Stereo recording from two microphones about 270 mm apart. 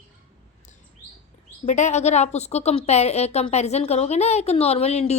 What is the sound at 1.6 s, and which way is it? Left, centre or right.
A woman's voice, left.